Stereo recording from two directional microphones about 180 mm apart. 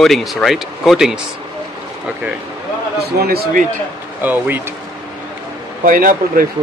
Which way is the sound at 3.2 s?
60° right (ahead or behind).